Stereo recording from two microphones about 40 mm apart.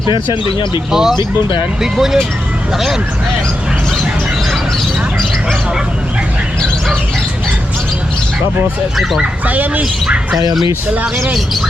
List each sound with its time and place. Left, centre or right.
0.9 s speech: centre
9.5 s speech: right